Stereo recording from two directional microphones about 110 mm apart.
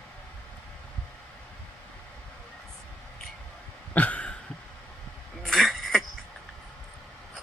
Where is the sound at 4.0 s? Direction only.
15° left (ahead or behind).